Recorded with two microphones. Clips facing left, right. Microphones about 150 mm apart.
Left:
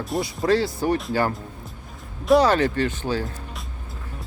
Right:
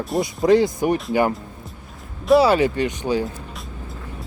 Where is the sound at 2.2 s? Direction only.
5° right (ahead or behind).